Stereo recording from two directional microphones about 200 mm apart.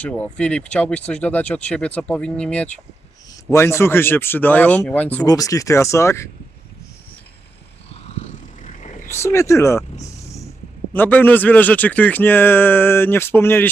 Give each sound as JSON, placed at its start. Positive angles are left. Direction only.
{"t": 0.0, "sound": "speech", "side_deg": 5}
{"t": 8.0, "sound": "vehicle", "side_deg": 35}
{"t": 9.0, "sound": "speech", "side_deg": 15}
{"t": 10.9, "sound": "speech", "side_deg": 10}